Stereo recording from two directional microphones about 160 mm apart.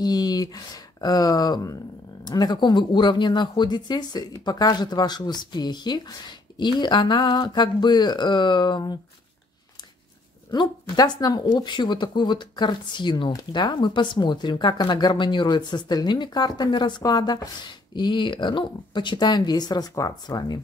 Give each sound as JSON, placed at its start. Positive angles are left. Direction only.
{"t": 0.0, "sound": "speech", "side_deg": 25}
{"t": 10.5, "sound": "speech", "side_deg": 25}